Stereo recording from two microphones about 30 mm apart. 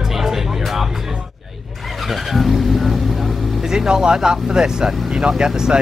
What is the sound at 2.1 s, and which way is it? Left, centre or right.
Vehicle, centre.